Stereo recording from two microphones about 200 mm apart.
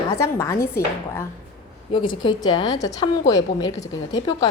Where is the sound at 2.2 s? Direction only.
20° left (ahead or behind).